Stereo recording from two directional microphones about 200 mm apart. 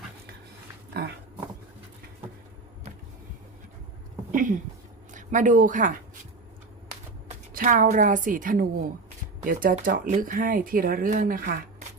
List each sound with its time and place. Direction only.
4.3 s a sound: 40° right (ahead or behind)
5.1 s speech: 40° right (ahead or behind)
7.5 s speech: 40° right (ahead or behind)